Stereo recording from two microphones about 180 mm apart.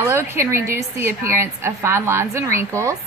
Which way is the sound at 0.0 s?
15° right (ahead or behind).